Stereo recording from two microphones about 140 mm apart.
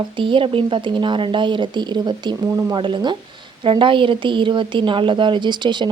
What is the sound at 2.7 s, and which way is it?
A woman's voice, 35° right (ahead or behind).